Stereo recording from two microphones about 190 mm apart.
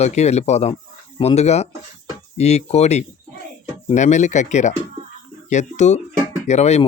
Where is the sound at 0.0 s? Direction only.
35° left (ahead or behind).